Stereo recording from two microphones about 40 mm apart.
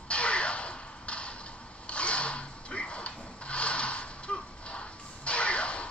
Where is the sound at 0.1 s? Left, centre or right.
Left.